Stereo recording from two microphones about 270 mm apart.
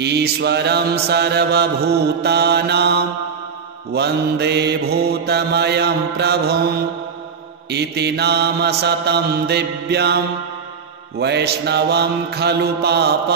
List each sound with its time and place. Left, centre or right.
0.0 s mantra: right
7.7 s mantra: right
11.1 s mantra: right